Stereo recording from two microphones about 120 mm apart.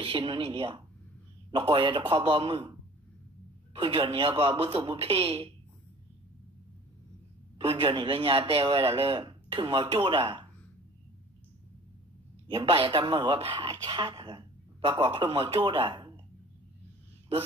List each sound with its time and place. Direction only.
0.0 s a man's voice: 40° right (ahead or behind)
3.7 s a man's voice: 40° right (ahead or behind)
7.5 s a man's voice: 50° right (ahead or behind)
12.4 s a man's voice: 45° right (ahead or behind)